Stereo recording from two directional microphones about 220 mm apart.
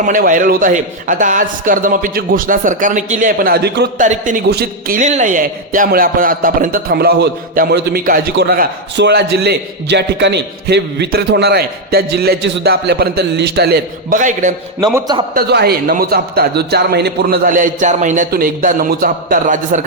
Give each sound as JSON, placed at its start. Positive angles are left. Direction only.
{"t": 0.0, "sound": "a man's voice", "side_deg": -35}
{"t": 4.0, "sound": "a man's voice", "side_deg": -35}
{"t": 14.9, "sound": "a man's voice", "side_deg": -20}
{"t": 15.4, "sound": "a man's voice", "side_deg": -45}